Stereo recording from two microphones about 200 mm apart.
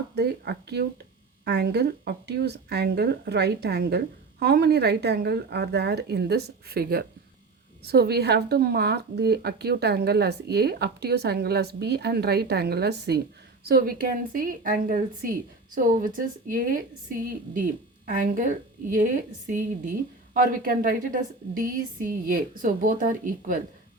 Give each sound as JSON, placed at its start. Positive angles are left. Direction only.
{"t": 0.2, "sound": "speech", "side_deg": -55}
{"t": 19.5, "sound": "a woman's voice", "side_deg": -40}